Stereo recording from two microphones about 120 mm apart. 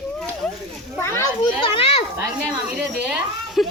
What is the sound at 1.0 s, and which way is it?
Children playing, 25° left (ahead or behind).